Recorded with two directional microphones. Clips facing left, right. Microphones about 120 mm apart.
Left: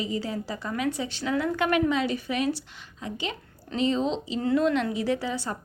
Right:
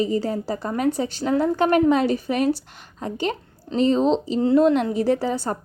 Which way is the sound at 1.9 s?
45° right (ahead or behind).